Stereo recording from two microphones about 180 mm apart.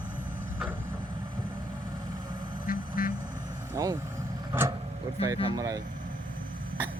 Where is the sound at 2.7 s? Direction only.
50° left (ahead or behind).